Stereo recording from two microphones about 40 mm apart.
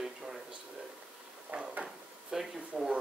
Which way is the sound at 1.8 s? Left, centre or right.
Centre.